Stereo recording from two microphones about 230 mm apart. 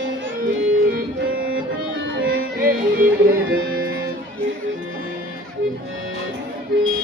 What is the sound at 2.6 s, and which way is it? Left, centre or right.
Music, right.